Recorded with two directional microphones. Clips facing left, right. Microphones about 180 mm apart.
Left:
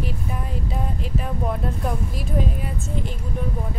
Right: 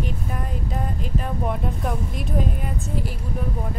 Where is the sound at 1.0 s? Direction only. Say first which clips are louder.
Even; centre (ahead or behind).